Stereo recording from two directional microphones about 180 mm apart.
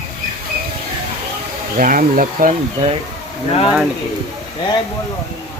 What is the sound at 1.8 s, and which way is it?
Speech, 50° right (ahead or behind).